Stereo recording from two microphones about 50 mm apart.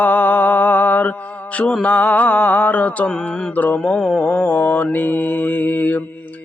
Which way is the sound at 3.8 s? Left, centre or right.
Left.